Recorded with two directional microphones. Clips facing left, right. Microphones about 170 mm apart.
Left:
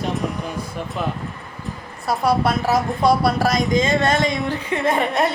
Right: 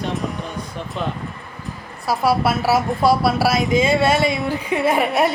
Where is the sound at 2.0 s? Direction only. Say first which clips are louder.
Even; centre (ahead or behind).